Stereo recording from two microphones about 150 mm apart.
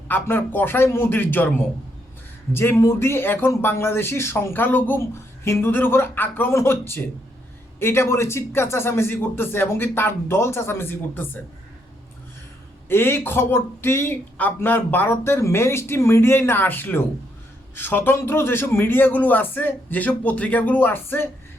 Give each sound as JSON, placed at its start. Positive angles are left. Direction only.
{"t": 0.1, "sound": "speech", "side_deg": 15}
{"t": 12.9, "sound": "speech", "side_deg": 15}